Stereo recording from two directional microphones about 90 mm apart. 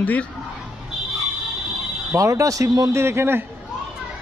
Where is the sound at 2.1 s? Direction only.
35° right (ahead or behind).